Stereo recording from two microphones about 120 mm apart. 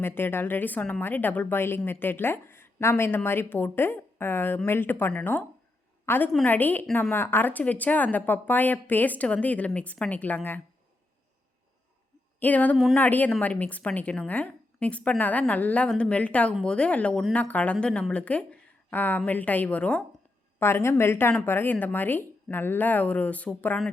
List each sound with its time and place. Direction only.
0.0 s a woman's voice: 20° left (ahead or behind)
12.4 s a woman's voice: 15° left (ahead or behind)